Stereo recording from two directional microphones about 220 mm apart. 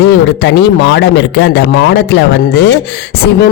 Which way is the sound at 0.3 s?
50° left (ahead or behind).